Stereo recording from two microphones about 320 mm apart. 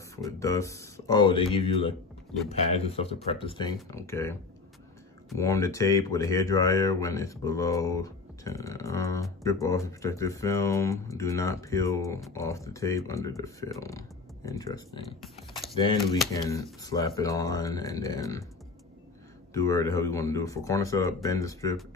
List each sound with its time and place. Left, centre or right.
0.1 s speech: centre
14.9 s speech: centre
15.7 s speech: centre
19.5 s speech: centre